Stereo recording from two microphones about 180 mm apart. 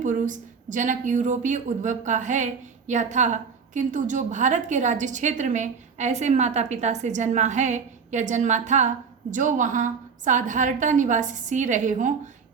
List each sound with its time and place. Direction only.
0.0 s a woman's voice: 45° right (ahead or behind)